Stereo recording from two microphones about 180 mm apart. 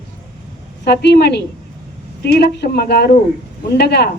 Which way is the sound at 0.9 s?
65° left (ahead or behind).